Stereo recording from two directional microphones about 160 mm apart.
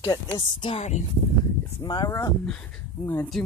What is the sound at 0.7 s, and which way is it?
Speech, 45° left (ahead or behind).